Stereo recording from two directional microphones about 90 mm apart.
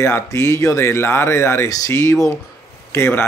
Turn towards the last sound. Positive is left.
turn(degrees=25)  # may be behind; listen again after turning